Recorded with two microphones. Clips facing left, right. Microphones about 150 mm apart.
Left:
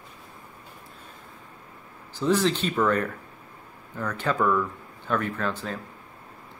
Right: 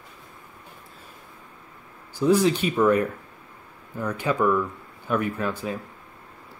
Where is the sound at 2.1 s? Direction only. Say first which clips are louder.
Right 3 dB; 10° right (ahead or behind).